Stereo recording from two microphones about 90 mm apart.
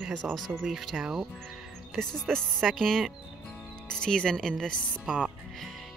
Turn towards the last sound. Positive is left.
turn(degrees=5)  # may be behind; listen again after turning